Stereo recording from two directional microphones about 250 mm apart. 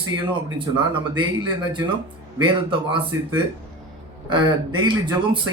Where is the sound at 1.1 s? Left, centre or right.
Centre.